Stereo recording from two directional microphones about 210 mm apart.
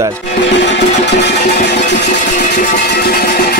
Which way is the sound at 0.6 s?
55° left (ahead or behind).